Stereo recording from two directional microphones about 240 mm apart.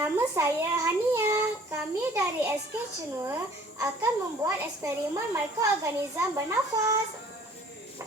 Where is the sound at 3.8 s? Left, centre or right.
Centre.